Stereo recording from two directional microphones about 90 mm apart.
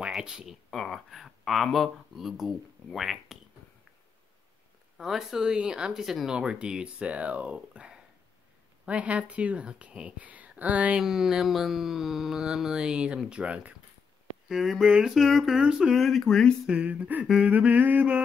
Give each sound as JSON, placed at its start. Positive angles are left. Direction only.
{"t": 0.0, "sound": "speech", "side_deg": -10}
{"t": 0.7, "sound": "speech", "side_deg": 0}
{"t": 4.9, "sound": "speech", "side_deg": -5}
{"t": 14.5, "sound": "speech", "side_deg": 0}
{"t": 16.6, "sound": "speech", "side_deg": -15}